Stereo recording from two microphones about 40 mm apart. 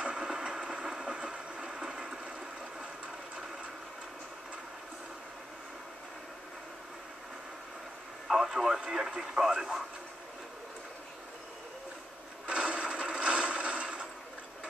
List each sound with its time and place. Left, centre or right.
0.0 s train: right
8.3 s speech: centre
12.4 s mechanisms: right